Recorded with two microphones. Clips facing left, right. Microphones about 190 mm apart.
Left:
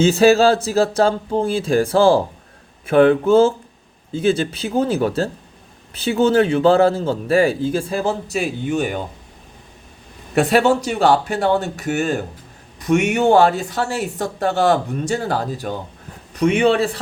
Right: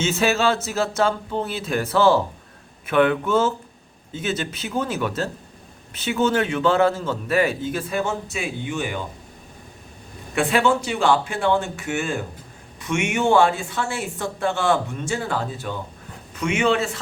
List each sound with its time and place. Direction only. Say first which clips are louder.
0.0 s a man's voice: left 8 dB; 35° left (ahead or behind)
10.3 s a man's voice: left 5 dB; 40° left (ahead or behind)